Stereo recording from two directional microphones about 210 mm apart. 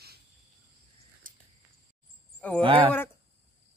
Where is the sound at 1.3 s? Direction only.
40° right (ahead or behind).